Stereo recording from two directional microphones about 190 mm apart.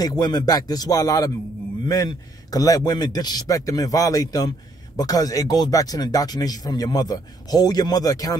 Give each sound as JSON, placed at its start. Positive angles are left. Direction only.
{"t": 0.0, "sound": "a man's voice", "side_deg": 20}